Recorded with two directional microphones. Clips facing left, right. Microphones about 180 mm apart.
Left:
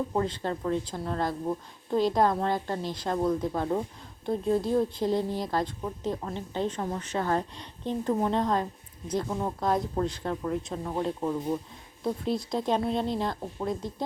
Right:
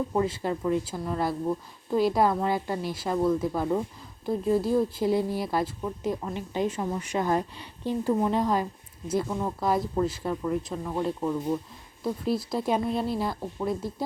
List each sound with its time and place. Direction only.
0.1 s a woman's voice: 5° right (ahead or behind)
9.2 s speech: 5° left (ahead or behind)
9.6 s speech: 5° right (ahead or behind)
12.0 s speech: 5° right (ahead or behind)